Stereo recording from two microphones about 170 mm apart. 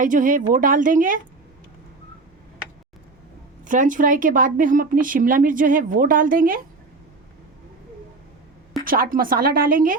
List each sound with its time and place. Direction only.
0.0 s speech: 50° right (ahead or behind)
3.7 s speech: 50° right (ahead or behind)
8.8 s speech: 55° right (ahead or behind)